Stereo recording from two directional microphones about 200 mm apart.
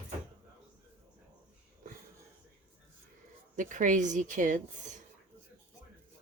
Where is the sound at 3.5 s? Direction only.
40° right (ahead or behind).